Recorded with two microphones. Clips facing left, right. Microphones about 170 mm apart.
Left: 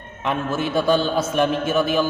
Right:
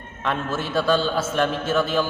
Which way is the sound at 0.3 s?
15° left (ahead or behind).